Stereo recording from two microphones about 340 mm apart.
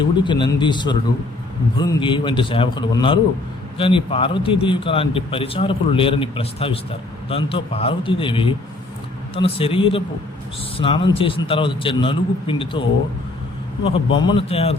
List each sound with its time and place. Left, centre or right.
0.0 s a man's voice: centre
13.8 s a man's voice: centre